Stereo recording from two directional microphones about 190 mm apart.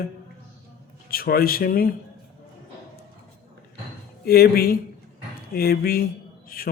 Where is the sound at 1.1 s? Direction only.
50° left (ahead or behind).